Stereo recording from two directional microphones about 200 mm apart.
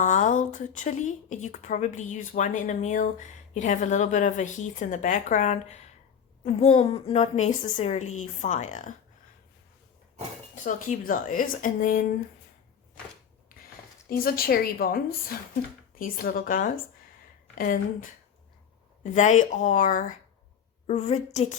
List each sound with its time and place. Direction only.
0.0 s speech: 40° left (ahead or behind)
10.5 s speech: 40° left (ahead or behind)
14.1 s speech: 50° left (ahead or behind)